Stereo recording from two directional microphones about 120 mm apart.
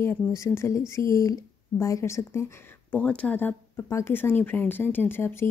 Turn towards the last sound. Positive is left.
turn(degrees=20)  # may be behind; listen again after turning